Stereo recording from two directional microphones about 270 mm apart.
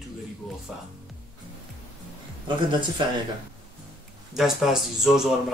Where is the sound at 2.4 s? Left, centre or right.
Centre.